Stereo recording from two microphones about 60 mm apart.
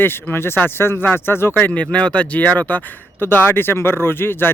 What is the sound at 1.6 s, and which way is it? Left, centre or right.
A man's voice, left.